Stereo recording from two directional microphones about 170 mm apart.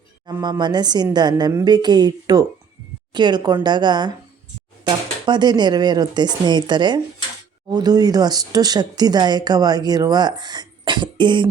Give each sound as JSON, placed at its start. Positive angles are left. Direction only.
{"t": 0.3, "sound": "speech", "side_deg": -20}